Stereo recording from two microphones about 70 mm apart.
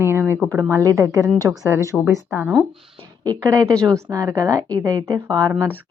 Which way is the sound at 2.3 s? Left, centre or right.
Right.